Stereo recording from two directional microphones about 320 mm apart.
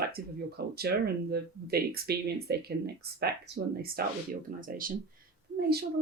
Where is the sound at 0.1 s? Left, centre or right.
Right.